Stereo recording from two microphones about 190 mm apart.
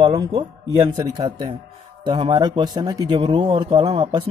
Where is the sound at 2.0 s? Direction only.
25° right (ahead or behind).